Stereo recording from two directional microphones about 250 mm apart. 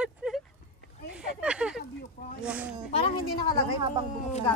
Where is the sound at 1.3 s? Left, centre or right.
Centre.